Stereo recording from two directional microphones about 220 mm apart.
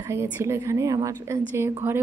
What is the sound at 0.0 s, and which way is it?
A woman's voice, 10° right (ahead or behind).